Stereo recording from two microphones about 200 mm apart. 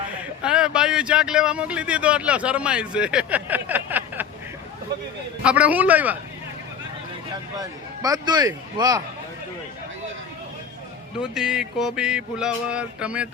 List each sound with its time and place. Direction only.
0.2 s speech: 5° right (ahead or behind)
5.4 s a man's voice: 5° right (ahead or behind)
7.6 s a man's voice: 20° right (ahead or behind)
11.2 s speech: 5° right (ahead or behind)